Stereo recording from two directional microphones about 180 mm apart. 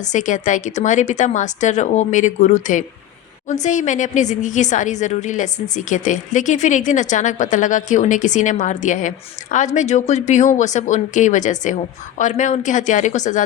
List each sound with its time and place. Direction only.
0.0 s a woman's voice: 45° left (ahead or behind)